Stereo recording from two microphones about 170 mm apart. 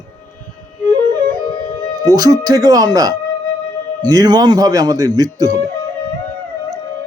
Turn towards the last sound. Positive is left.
turn(degrees=-20)  # may be behind; listen again after turning